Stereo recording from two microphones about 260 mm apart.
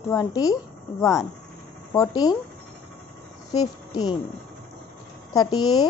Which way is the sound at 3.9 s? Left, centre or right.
Centre.